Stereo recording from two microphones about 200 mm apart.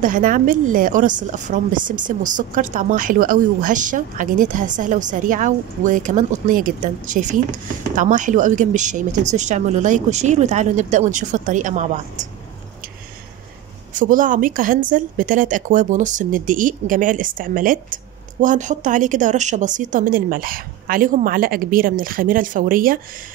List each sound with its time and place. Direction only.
0.0 s speech: 40° right (ahead or behind)
13.9 s speech: 40° right (ahead or behind)